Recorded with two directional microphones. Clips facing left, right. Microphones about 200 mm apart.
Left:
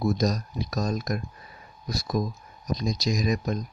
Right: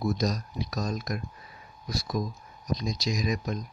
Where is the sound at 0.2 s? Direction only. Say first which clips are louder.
Left 3 dB; 40° left (ahead or behind).